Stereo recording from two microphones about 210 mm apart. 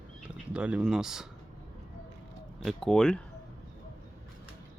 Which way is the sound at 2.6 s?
Centre (ahead or behind).